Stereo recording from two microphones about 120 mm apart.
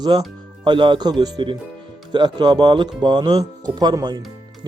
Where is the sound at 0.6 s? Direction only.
40° right (ahead or behind).